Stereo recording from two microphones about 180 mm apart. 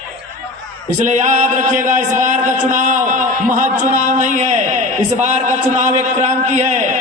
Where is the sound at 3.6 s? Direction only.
40° right (ahead or behind).